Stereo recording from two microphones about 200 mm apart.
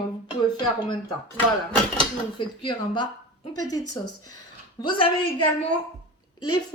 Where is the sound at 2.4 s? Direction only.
25° left (ahead or behind).